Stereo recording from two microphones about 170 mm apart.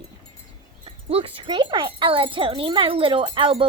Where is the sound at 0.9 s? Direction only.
35° right (ahead or behind).